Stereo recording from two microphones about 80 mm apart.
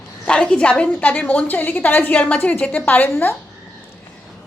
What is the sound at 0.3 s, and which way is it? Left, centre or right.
A woman's voice, centre.